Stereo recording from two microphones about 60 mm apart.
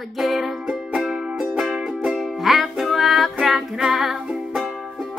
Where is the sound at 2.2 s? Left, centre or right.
Centre.